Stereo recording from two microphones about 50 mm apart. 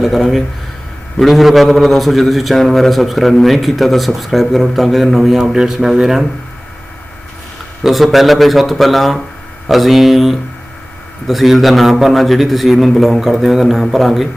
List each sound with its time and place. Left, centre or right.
0.0 s a man's voice: centre
7.9 s a man's voice: centre